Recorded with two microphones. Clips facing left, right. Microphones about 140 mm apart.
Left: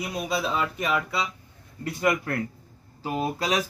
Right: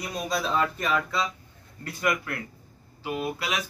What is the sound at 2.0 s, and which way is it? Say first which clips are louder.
Speech: left 3 dB; 25° left (ahead or behind).